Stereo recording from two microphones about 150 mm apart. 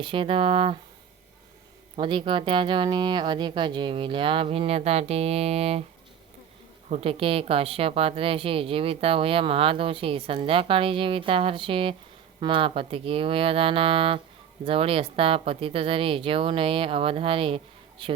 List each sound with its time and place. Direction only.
0.0 s a woman's voice: 35° right (ahead or behind)
2.0 s a woman's voice: 35° right (ahead or behind)
6.9 s a woman's voice: 40° right (ahead or behind)